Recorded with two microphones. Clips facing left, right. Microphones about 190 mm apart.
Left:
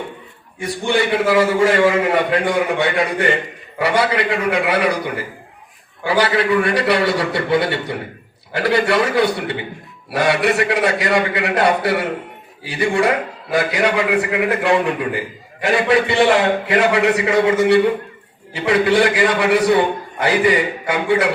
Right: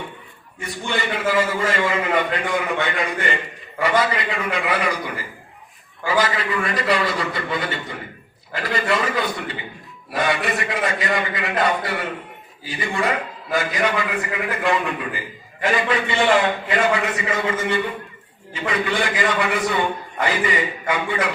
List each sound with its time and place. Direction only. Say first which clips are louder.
0.6 s a man's voice: left 7 dB; 75° left (ahead or behind)